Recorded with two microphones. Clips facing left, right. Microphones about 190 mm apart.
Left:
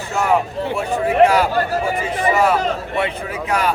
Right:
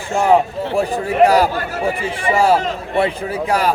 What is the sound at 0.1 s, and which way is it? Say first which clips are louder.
A man's voice: right 4 dB; 35° right (ahead or behind).